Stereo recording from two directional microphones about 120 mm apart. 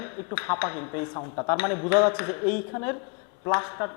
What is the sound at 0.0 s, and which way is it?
Speech, 25° left (ahead or behind).